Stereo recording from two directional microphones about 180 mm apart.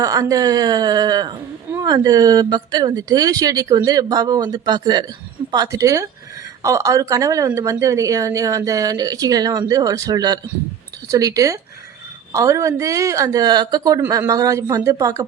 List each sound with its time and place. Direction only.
0.0 s speech: 20° right (ahead or behind)